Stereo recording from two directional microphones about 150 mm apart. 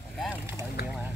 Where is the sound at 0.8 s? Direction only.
90° left.